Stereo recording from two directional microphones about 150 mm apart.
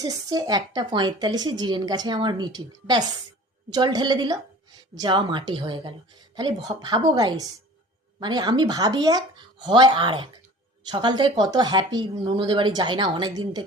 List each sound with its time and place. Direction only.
0.0 s speech: 25° right (ahead or behind)